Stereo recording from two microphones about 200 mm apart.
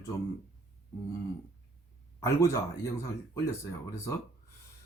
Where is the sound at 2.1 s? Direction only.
15° left (ahead or behind).